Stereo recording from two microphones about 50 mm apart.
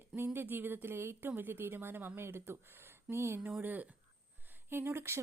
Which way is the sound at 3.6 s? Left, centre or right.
Right.